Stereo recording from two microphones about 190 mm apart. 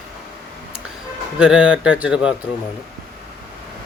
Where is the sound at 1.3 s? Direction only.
5° right (ahead or behind).